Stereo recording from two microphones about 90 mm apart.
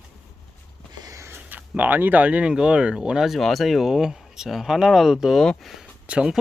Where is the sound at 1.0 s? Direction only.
35° right (ahead or behind).